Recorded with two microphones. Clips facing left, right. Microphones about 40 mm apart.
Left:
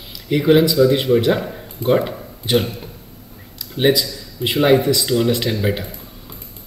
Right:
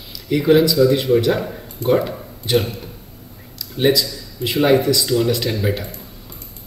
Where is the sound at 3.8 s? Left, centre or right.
Centre.